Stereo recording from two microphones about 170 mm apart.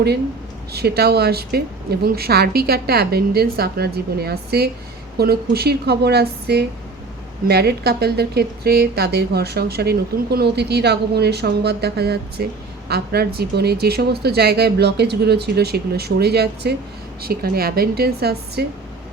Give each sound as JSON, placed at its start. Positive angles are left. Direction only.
{"t": 0.7, "sound": "a woman's voice", "side_deg": -70}